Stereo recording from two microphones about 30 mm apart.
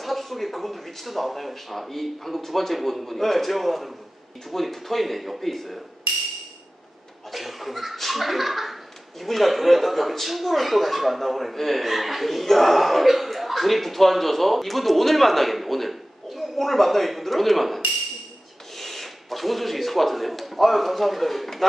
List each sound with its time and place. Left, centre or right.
0.0 s speech: centre
7.2 s chuckle: centre
9.2 s a man's voice: centre